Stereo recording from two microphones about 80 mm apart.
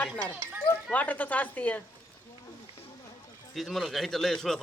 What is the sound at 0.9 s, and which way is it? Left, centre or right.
Speech, left.